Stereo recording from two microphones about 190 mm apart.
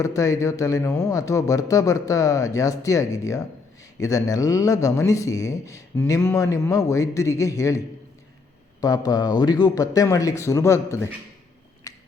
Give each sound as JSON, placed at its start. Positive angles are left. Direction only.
{"t": 0.0, "sound": "speech", "side_deg": 15}
{"t": 8.8, "sound": "speech", "side_deg": 20}
{"t": 11.9, "sound": "finger snapping", "side_deg": 15}